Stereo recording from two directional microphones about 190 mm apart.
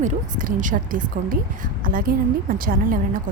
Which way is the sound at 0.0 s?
45° right (ahead or behind).